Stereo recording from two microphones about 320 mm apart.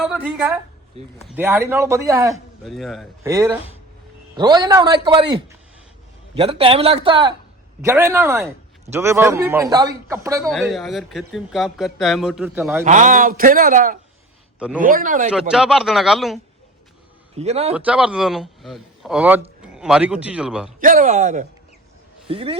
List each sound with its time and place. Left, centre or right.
0.0 s a man's voice: centre
10.5 s speech: centre
12.8 s a man's voice: right
15.3 s speech: centre
17.3 s a man's voice: centre
17.7 s speech: centre
20.8 s a man's voice: right